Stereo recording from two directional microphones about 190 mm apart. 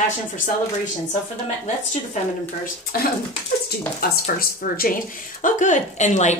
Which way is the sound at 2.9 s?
50° left (ahead or behind).